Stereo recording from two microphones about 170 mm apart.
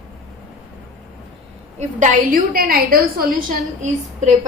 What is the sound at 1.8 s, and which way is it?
A woman's voice, 45° right (ahead or behind).